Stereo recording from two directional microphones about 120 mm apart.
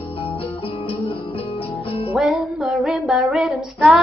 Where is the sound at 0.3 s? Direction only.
50° left (ahead or behind).